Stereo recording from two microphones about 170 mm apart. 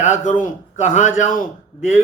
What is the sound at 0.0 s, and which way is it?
Speech, 50° left (ahead or behind).